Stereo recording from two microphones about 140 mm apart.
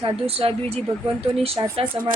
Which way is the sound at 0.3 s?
45° right (ahead or behind).